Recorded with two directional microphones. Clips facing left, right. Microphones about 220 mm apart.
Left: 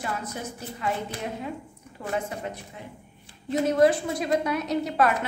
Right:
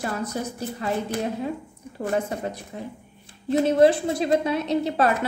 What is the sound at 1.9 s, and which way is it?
Speech, 40° right (ahead or behind).